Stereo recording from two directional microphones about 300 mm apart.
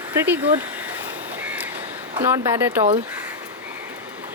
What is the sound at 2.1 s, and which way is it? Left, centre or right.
Speech, centre.